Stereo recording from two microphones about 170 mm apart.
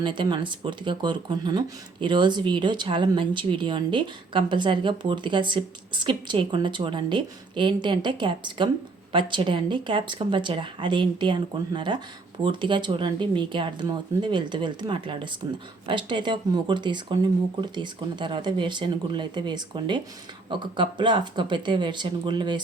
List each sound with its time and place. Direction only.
0.0 s speech: 25° right (ahead or behind)